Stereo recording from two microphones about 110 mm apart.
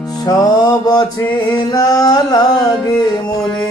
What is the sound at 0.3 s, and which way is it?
Music, 35° left (ahead or behind).